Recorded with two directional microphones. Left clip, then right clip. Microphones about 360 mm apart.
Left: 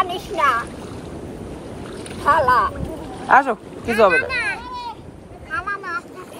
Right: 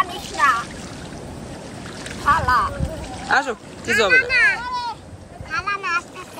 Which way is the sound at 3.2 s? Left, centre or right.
Centre.